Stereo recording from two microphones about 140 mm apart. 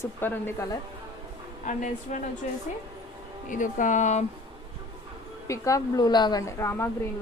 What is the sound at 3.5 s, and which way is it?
Speech, 65° left (ahead or behind).